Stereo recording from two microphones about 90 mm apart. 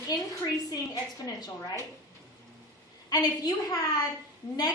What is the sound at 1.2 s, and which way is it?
Speech, 45° left (ahead or behind).